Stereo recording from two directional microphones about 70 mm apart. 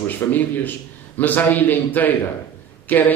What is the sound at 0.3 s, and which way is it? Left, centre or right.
A man's voice, left.